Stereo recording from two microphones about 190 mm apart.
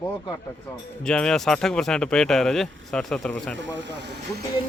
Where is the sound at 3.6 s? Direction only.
70° right (ahead or behind).